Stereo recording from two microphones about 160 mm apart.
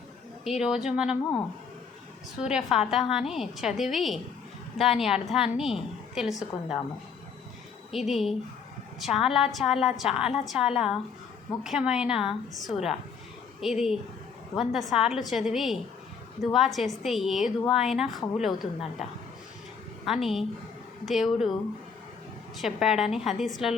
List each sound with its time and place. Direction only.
0.4 s a woman's voice: 5° right (ahead or behind)
2.4 s a woman's voice: 5° right (ahead or behind)
7.9 s a woman's voice: centre (ahead or behind)
20.1 s a woman's voice: centre (ahead or behind)
22.6 s a woman's voice: centre (ahead or behind)